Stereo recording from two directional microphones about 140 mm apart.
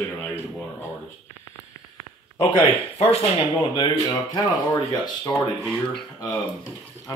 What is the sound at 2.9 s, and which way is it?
Speech, 45° left (ahead or behind).